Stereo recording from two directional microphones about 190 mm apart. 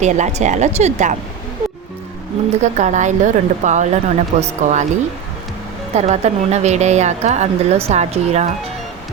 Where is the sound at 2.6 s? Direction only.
40° right (ahead or behind).